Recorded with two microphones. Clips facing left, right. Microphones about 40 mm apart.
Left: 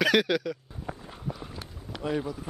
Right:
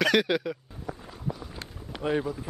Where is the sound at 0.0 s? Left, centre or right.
Centre.